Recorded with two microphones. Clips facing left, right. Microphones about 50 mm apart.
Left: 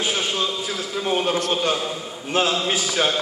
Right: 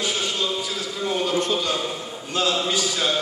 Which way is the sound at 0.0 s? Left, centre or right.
Left.